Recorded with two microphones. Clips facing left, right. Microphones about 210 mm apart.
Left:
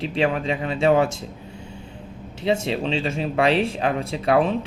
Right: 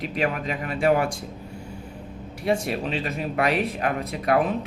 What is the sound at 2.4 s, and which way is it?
Speech, 25° left (ahead or behind).